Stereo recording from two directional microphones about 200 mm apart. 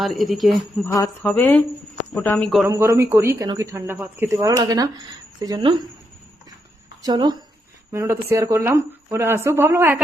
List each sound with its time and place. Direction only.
0.0 s a woman's voice: centre (ahead or behind)
0.9 s a woman's voice: 10° left (ahead or behind)
2.6 s speech: 15° right (ahead or behind)
7.0 s speech: 20° right (ahead or behind)